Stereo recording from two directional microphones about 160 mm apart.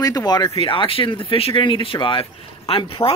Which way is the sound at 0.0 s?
20° left (ahead or behind).